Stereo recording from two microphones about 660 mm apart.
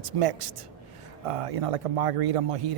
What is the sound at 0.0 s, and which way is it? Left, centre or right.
A man's voice, right.